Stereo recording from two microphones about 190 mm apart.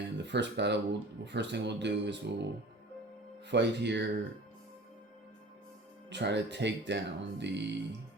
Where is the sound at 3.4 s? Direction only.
65° right (ahead or behind).